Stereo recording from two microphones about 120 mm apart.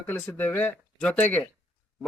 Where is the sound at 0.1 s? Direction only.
15° left (ahead or behind).